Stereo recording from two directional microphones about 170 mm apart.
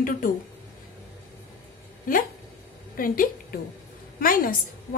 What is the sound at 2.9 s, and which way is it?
A woman's voice, 55° left (ahead or behind).